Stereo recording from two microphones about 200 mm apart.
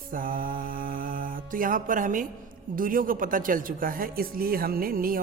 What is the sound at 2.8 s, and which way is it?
A woman's voice, 45° right (ahead or behind).